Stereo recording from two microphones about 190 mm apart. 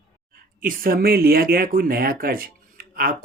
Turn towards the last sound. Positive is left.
turn(degrees=-50)  # may be behind; listen again after turning